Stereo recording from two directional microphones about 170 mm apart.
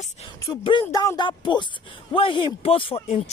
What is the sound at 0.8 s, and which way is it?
Speech, 20° left (ahead or behind).